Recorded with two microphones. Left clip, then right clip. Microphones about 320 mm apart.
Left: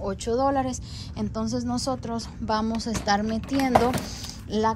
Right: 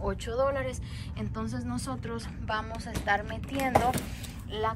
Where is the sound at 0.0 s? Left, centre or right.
Centre.